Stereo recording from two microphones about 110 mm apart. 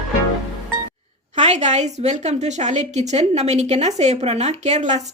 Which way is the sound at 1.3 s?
90° right.